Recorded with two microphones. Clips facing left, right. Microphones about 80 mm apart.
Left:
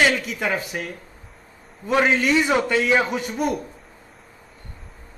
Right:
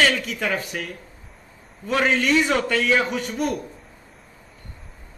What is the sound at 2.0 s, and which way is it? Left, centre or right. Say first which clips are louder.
Speech: right 2 dB; centre.